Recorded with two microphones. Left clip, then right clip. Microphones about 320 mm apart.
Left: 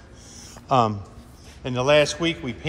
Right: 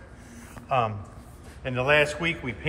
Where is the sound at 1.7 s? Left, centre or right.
Centre.